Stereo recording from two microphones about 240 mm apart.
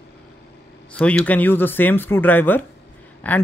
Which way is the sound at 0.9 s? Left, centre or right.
Centre.